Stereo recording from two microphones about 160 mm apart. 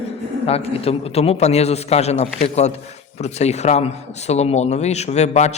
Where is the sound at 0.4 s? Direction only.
40° left (ahead or behind).